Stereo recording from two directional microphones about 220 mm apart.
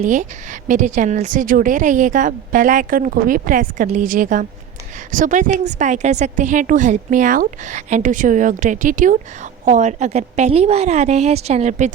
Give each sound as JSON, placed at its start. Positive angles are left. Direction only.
{"t": 0.0, "sound": "a woman's voice", "side_deg": -35}